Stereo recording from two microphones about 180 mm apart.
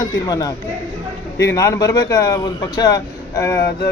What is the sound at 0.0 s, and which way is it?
Speech, 20° left (ahead or behind).